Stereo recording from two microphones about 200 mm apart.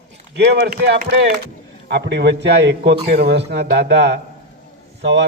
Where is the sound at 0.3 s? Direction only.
55° right (ahead or behind).